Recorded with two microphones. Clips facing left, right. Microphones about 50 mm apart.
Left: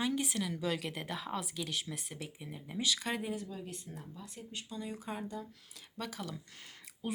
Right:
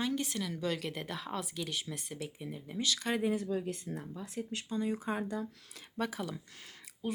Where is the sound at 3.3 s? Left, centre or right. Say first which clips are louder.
Right 7 dB; right.